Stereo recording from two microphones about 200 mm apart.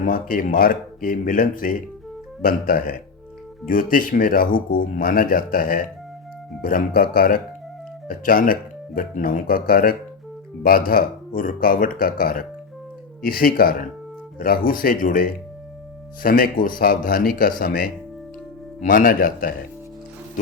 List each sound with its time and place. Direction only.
0.0 s speech: 45° left (ahead or behind)